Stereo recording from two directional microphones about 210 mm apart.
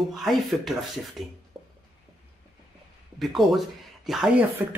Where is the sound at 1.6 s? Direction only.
20° right (ahead or behind).